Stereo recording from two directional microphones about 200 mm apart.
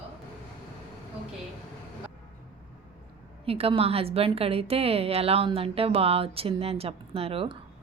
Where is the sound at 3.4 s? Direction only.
30° right (ahead or behind).